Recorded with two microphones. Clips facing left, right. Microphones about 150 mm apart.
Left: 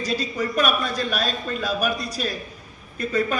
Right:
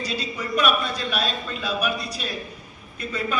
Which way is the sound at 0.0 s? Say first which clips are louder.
Left 4 dB; 45° left (ahead or behind).